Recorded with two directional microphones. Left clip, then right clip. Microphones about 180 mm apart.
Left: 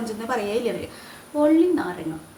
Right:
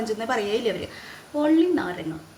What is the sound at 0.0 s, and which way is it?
A woman's voice, 30° right (ahead or behind).